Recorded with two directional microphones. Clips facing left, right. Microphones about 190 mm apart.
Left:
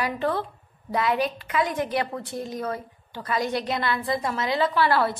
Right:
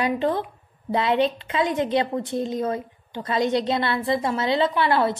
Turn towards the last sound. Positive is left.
turn(degrees=-20)  # may be behind; listen again after turning